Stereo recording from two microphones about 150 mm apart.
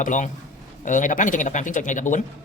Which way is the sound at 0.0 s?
55° left (ahead or behind).